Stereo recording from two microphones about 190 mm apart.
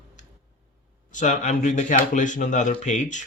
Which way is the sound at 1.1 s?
40° left (ahead or behind).